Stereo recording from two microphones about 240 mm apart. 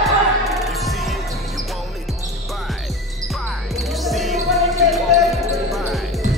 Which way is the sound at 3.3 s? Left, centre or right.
Centre.